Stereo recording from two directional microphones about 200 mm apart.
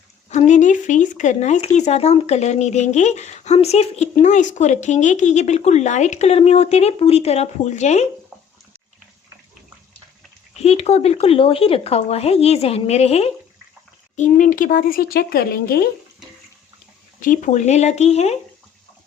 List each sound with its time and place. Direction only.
0.3 s speech: 35° left (ahead or behind)
10.6 s speech: 30° left (ahead or behind); by 15.9 s 50° left (ahead or behind)
17.2 s speech: 40° left (ahead or behind)